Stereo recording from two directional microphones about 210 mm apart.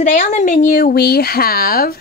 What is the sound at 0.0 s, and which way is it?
Speech, 35° left (ahead or behind).